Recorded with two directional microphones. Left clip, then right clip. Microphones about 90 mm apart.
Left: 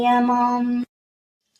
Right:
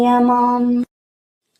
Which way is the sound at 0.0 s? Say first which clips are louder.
Right 4 dB; 40° right (ahead or behind).